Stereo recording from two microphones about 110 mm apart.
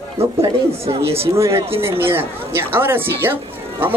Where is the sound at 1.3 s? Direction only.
25° right (ahead or behind).